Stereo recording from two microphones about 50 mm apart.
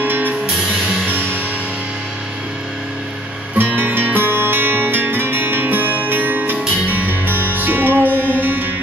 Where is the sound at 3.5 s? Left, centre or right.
Right.